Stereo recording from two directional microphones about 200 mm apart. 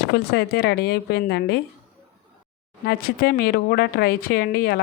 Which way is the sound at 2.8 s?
50° left (ahead or behind).